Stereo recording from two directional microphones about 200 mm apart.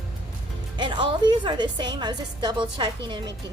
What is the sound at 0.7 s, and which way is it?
A woman's voice, 25° right (ahead or behind).